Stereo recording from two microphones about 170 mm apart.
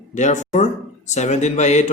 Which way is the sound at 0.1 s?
45° left (ahead or behind).